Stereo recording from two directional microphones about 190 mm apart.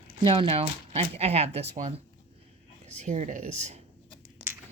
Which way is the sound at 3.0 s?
40° right (ahead or behind).